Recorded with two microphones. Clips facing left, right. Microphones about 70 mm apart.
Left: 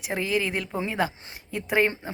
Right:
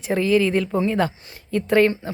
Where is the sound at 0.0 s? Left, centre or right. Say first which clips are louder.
Right 8 dB; centre.